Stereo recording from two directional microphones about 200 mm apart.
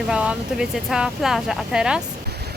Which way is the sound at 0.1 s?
5° right (ahead or behind).